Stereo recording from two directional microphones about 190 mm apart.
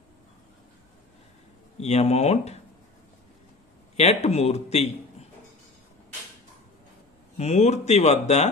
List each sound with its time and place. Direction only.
1.8 s speech: 35° left (ahead or behind)
3.9 s speech: 35° left (ahead or behind)
7.3 s speech: 35° left (ahead or behind)